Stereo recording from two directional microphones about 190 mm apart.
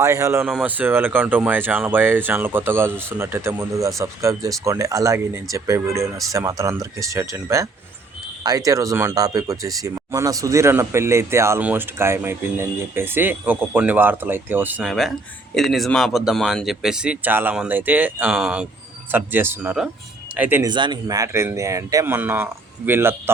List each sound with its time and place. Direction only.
0.0 s speech: 15° right (ahead or behind)
20.7 s speech: 25° right (ahead or behind)